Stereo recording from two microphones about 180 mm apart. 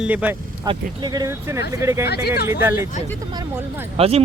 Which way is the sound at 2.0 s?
65° left (ahead or behind).